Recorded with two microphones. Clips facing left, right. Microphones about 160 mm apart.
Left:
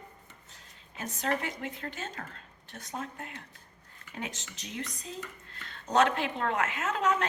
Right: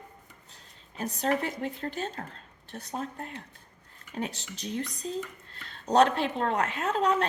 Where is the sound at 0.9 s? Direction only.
35° right (ahead or behind).